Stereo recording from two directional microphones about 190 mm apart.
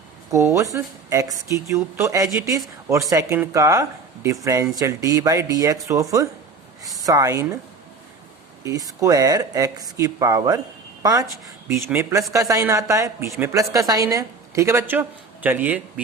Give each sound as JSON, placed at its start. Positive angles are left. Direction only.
{"t": 0.3, "sound": "speech", "side_deg": -15}
{"t": 8.6, "sound": "speech", "side_deg": -20}